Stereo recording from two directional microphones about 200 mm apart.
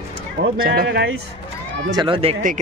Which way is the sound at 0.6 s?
45° right (ahead or behind).